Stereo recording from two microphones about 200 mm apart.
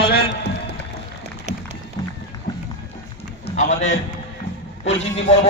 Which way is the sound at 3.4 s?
35° left (ahead or behind).